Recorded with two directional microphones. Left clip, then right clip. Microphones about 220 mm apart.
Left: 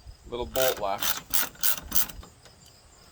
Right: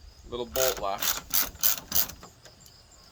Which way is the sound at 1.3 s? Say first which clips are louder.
Right 1 dB; 5° left (ahead or behind).